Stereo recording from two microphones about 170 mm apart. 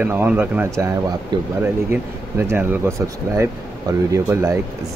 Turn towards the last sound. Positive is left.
turn(degrees=-15)  # may be behind; listen again after turning